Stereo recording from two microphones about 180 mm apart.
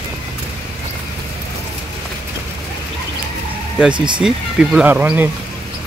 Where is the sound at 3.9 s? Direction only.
25° right (ahead or behind).